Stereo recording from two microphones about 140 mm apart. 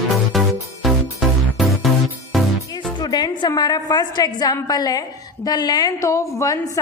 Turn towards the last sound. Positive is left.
turn(degrees=20)  # may be behind; listen again after turning